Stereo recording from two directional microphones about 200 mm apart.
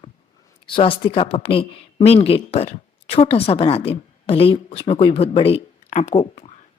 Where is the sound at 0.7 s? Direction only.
25° left (ahead or behind).